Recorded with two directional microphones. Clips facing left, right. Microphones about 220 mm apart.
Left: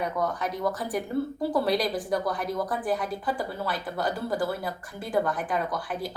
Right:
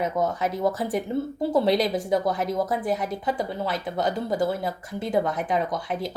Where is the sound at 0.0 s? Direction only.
25° right (ahead or behind).